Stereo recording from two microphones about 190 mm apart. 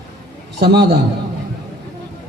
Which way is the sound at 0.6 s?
60° right (ahead or behind).